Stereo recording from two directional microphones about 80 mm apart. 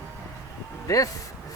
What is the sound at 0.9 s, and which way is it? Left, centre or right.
Speech, left.